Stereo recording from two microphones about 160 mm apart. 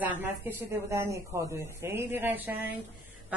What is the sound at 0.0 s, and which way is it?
A man's voice, 10° right (ahead or behind).